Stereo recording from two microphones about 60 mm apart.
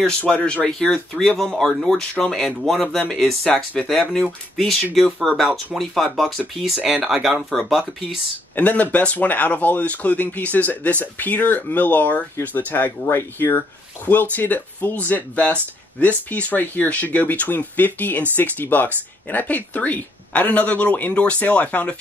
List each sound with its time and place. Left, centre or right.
0.3 s speech: centre
6.8 s speech: centre
8.5 s speech: left